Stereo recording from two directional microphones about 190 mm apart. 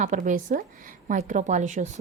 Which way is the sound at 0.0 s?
40° right (ahead or behind).